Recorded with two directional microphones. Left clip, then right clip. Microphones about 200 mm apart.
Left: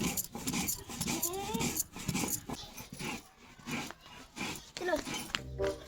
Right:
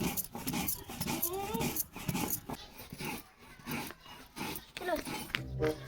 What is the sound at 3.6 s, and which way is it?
Rub, centre (ahead or behind).